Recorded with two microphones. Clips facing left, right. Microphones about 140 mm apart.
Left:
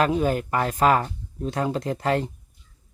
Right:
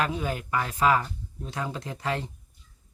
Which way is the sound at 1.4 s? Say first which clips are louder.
Left 8 dB; 55° left (ahead or behind).